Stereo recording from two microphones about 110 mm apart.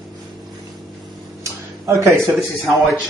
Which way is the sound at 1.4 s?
30° right (ahead or behind).